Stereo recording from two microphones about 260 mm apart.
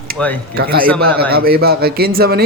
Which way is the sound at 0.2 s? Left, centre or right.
Centre.